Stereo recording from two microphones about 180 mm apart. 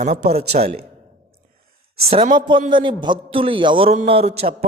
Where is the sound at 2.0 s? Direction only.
30° right (ahead or behind).